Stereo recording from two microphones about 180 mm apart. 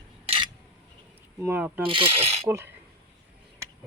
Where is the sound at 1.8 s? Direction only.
30° right (ahead or behind).